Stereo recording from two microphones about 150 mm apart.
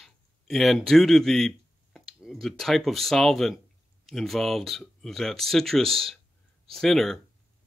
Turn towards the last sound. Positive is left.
turn(degrees=0)  # may be behind; listen again after turning